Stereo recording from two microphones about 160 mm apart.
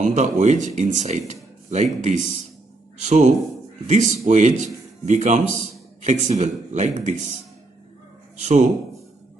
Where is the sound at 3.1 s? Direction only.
45° right (ahead or behind).